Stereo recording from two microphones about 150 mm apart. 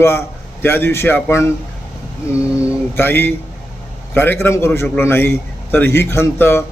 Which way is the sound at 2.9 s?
15° left (ahead or behind).